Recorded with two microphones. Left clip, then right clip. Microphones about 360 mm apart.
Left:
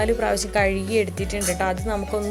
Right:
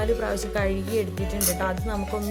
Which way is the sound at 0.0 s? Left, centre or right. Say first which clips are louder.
Left 4 dB; right.